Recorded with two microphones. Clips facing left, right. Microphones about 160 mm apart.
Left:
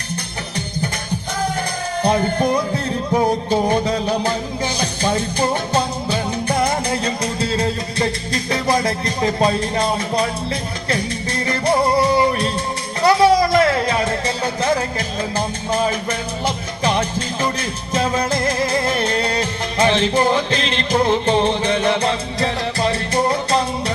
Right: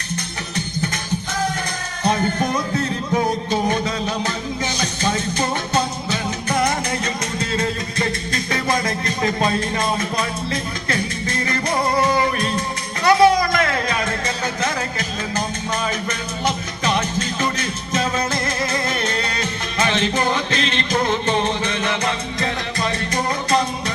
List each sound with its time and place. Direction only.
2.0 s music: 30° left (ahead or behind)